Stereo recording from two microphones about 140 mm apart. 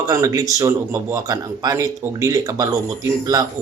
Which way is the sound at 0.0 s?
25° right (ahead or behind).